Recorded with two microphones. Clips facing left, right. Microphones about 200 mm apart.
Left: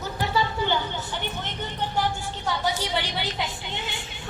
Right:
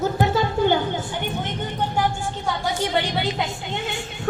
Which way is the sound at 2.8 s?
50° right (ahead or behind).